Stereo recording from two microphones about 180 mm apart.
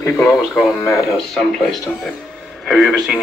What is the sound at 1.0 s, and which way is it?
Speech, centre (ahead or behind).